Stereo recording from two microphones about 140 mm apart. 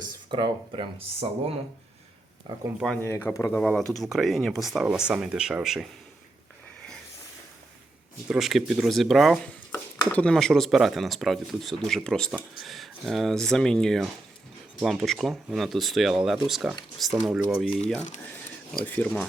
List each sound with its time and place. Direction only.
0.0 s speech: 35° right (ahead or behind)
3.0 s speech: 15° left (ahead or behind)
3.6 s speech: 5° left (ahead or behind)
8.3 s speech: centre (ahead or behind)
9.7 s speech: 10° left (ahead or behind)